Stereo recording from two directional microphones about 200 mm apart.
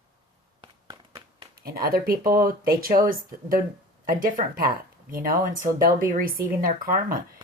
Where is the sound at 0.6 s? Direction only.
20° right (ahead or behind).